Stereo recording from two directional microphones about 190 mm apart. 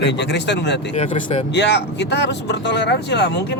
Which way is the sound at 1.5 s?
65° left (ahead or behind).